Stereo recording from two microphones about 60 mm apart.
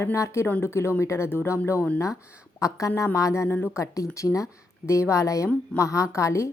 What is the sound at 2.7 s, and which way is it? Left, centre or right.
Speech, left.